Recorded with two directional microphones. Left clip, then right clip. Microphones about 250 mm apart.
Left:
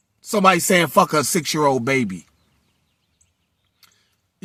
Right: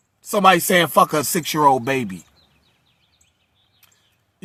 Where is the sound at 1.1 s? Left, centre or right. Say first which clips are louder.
Left 2 dB; right.